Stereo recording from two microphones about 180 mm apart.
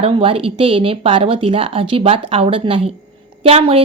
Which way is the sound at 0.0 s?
30° right (ahead or behind).